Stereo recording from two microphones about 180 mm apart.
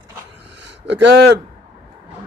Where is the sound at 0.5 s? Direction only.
75° right (ahead or behind).